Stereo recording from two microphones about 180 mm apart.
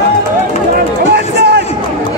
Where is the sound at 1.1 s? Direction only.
65° right (ahead or behind).